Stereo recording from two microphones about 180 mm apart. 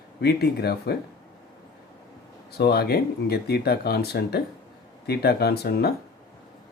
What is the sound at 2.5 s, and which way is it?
Speech, 60° left (ahead or behind).